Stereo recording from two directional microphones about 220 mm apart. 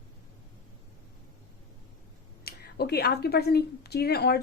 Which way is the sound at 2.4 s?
45° left (ahead or behind).